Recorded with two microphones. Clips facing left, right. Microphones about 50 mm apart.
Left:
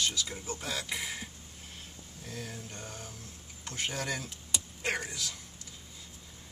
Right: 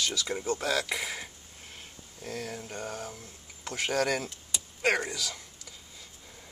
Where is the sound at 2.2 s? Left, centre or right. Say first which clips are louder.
Right 6 dB; right.